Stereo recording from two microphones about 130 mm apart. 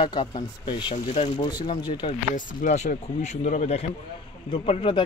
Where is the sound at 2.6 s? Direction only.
65° left (ahead or behind).